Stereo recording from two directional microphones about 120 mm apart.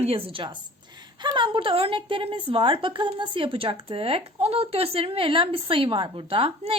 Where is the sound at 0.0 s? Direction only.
50° right (ahead or behind).